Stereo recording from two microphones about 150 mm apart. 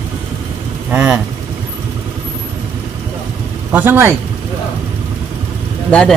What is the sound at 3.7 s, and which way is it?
Speech, 15° right (ahead or behind).